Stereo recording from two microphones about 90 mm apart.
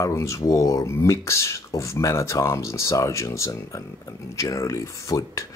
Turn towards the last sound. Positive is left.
turn(degrees=35)  # may be behind; listen again after turning